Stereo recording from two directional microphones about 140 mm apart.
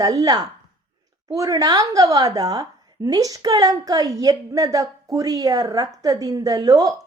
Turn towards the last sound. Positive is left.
turn(degrees=-25)  # may be behind; listen again after turning